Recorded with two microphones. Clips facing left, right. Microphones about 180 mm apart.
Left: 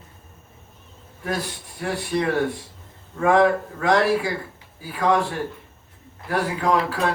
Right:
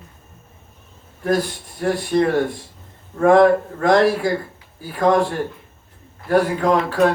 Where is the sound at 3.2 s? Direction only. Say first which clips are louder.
Right 5 dB; 40° right (ahead or behind).